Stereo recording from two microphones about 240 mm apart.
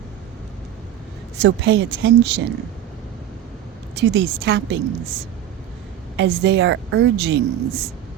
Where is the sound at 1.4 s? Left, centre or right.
Right.